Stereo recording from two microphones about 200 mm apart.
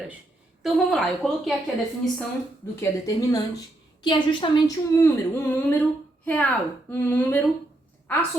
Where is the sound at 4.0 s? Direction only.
25° left (ahead or behind).